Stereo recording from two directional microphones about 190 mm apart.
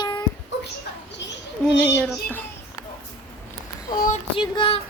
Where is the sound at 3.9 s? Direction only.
45° left (ahead or behind).